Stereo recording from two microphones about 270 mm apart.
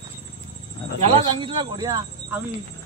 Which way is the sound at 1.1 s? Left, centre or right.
Centre.